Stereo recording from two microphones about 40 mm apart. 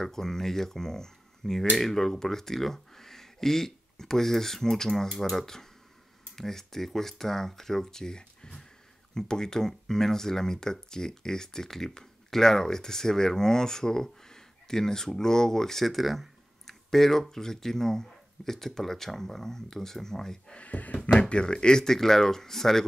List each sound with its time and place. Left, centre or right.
0.0 s speech: centre
20.5 s speech: left
21.3 s speech: left